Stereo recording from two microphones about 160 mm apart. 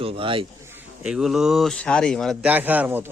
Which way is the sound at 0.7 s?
10° right (ahead or behind).